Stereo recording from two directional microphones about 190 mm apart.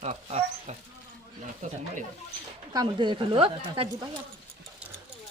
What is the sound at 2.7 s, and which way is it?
Speech, 25° right (ahead or behind).